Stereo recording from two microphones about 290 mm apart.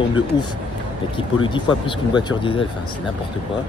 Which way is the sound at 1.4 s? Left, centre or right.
Centre.